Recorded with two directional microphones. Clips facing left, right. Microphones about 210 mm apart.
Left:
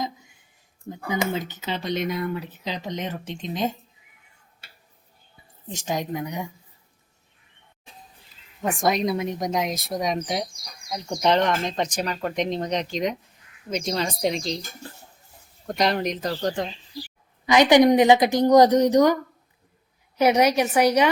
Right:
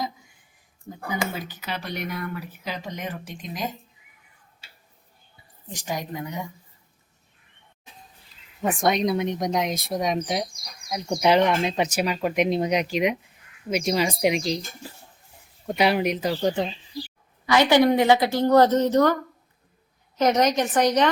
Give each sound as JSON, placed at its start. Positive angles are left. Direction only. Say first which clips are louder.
{"t": 0.9, "sound": "speech", "louder": "left 3 dB", "side_deg": 20}
{"t": 5.6, "sound": "speech", "louder": "left 3 dB", "side_deg": 20}
{"t": 8.6, "sound": "speech", "louder": "right 1 dB", "side_deg": 0}
{"t": 17.4, "sound": "a woman's voice", "louder": "left 2 dB", "side_deg": 15}